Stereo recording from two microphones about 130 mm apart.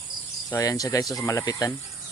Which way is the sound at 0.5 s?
30° left (ahead or behind).